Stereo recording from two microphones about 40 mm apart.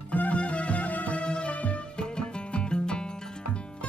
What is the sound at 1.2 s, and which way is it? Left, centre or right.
Music, left.